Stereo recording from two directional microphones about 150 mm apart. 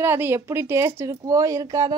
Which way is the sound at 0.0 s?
15° right (ahead or behind).